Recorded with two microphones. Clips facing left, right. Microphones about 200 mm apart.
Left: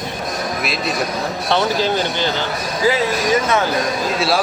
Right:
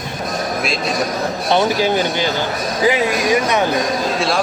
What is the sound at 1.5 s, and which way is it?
Speech, 15° right (ahead or behind).